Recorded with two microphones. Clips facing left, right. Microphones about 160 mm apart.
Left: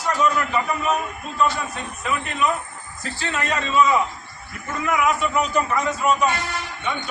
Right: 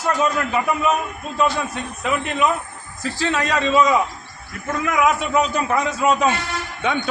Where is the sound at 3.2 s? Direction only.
90° right.